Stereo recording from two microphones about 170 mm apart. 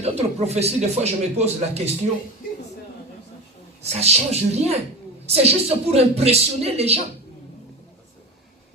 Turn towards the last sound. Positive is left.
turn(degrees=-40)  # may be behind; listen again after turning